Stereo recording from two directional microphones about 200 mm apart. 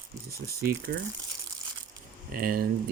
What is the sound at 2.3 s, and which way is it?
Speech, 45° right (ahead or behind).